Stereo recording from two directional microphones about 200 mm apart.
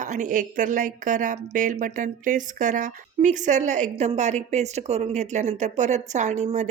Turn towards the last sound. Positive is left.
turn(degrees=-35)  # may be behind; listen again after turning